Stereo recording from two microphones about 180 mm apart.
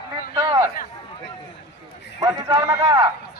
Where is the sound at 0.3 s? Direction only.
25° right (ahead or behind).